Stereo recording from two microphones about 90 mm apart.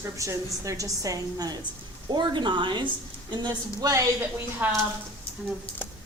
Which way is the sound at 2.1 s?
55° right (ahead or behind).